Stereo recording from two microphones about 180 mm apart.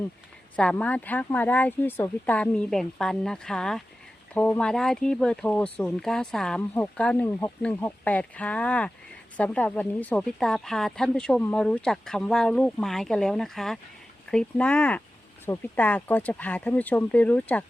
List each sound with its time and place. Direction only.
0.5 s speech: 5° left (ahead or behind)